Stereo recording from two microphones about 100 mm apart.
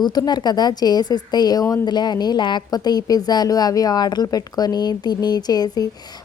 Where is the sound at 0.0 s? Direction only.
45° left (ahead or behind).